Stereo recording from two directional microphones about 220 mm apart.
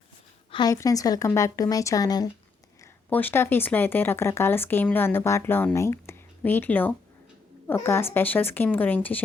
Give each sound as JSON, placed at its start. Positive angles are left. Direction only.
{"t": 0.5, "sound": "speech", "side_deg": 15}